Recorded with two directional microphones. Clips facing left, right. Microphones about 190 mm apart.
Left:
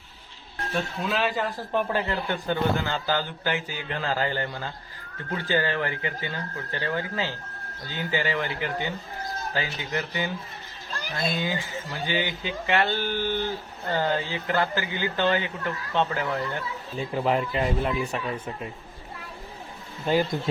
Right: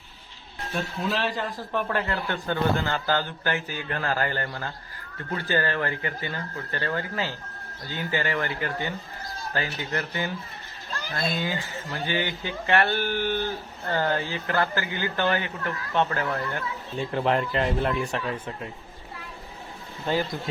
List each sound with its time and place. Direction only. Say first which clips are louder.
0.8 s speech: left 1 dB; centre (ahead or behind)
1.7 s speech: left 1 dB; 15° left (ahead or behind)
17.0 s speech: even; 5° left (ahead or behind)
20.1 s speech: left 3 dB; 15° left (ahead or behind)